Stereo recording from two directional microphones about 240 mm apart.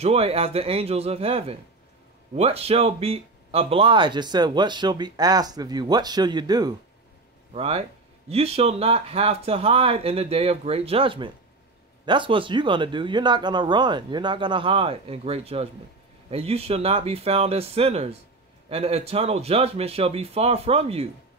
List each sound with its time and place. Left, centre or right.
0.0 s speech: right